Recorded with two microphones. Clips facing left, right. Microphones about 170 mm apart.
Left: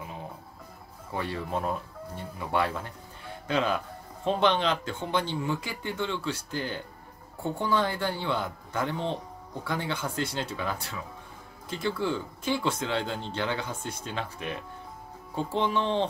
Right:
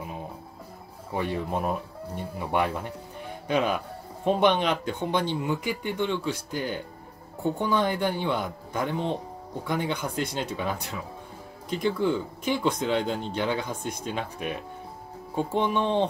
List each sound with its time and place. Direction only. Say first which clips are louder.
1.1 s a man's voice: right 3 dB; 15° right (ahead or behind)